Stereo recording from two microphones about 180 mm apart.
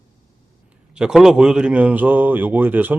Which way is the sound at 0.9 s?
5° right (ahead or behind).